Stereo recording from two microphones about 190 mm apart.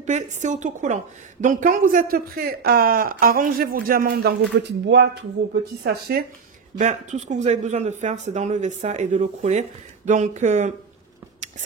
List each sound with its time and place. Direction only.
0.0 s a woman's voice: 40° right (ahead or behind); by 6.2 s 60° right (ahead or behind)
6.8 s speech: 35° right (ahead or behind)